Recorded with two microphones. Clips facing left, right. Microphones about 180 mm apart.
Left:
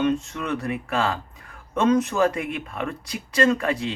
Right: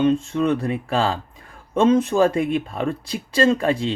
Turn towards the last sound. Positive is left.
turn(degrees=-30)  # may be behind; listen again after turning